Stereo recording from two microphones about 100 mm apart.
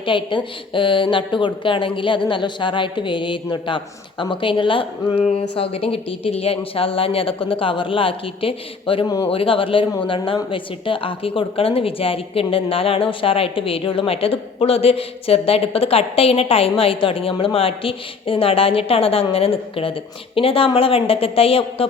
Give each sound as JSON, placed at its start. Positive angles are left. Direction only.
{"t": 0.0, "sound": "speech", "side_deg": 55}
{"t": 5.3, "sound": "speech", "side_deg": 75}